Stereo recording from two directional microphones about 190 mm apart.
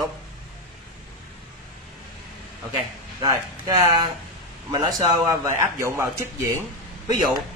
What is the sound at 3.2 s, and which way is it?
A man's voice, 20° right (ahead or behind).